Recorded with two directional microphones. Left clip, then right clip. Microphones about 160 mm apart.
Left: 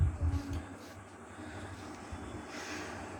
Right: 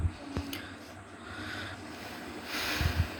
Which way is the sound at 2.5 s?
60° right (ahead or behind).